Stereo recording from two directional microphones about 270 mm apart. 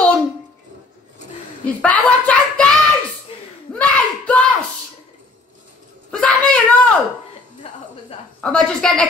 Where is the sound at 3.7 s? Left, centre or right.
Centre.